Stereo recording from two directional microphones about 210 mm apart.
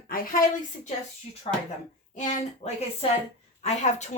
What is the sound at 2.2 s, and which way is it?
Speech, 35° left (ahead or behind).